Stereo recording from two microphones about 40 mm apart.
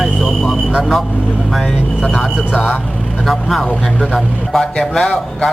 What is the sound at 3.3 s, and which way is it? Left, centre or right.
Speech, centre.